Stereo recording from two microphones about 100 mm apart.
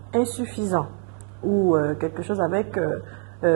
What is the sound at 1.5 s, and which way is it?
A woman's voice, 15° right (ahead or behind).